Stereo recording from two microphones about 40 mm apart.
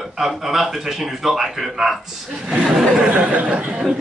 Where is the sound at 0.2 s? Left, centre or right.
Centre.